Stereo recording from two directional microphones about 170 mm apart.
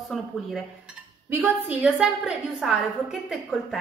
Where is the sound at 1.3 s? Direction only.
10° right (ahead or behind).